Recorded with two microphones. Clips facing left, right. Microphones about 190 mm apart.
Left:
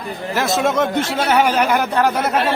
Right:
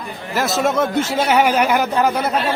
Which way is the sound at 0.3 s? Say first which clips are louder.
Even; centre (ahead or behind).